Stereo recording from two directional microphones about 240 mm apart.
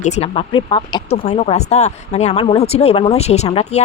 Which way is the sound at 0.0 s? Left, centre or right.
Left.